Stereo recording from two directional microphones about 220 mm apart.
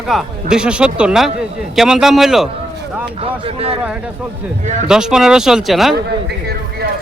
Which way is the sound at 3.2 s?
25° right (ahead or behind).